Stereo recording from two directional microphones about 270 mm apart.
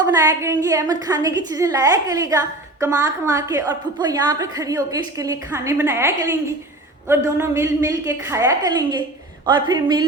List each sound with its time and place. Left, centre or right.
0.0 s a woman's voice: centre